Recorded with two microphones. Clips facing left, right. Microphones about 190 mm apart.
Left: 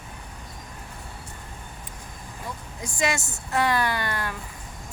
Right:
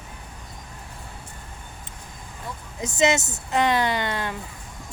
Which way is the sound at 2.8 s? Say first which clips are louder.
Right 6 dB; 20° right (ahead or behind).